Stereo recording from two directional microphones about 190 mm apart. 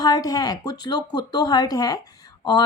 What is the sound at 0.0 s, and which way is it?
Speech, 20° left (ahead or behind).